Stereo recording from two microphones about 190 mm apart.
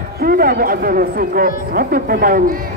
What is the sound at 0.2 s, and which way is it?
Speech, 55° right (ahead or behind).